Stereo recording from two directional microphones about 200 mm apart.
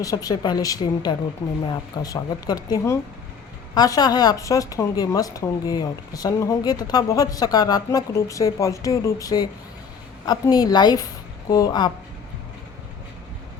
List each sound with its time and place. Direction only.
0.0 s speech: 20° left (ahead or behind)